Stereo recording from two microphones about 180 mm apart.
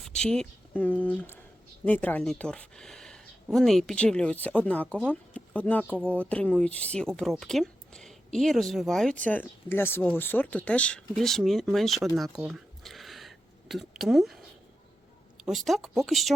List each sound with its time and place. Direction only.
0.0 s speech: 5° left (ahead or behind)
12.1 s a sound: centre (ahead or behind)
15.4 s speech: centre (ahead or behind)